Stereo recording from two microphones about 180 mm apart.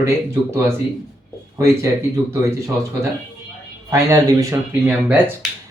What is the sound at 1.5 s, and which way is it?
Speech, 15° right (ahead or behind).